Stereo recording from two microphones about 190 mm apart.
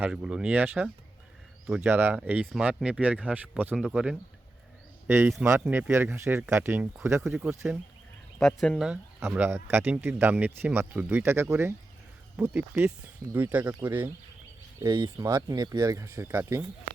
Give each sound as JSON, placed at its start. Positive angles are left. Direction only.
{"t": 0.0, "sound": "speech", "side_deg": -5}
{"t": 7.2, "sound": "speech", "side_deg": 0}
{"t": 8.9, "sound": "speech", "side_deg": -10}
{"t": 14.8, "sound": "speech", "side_deg": -20}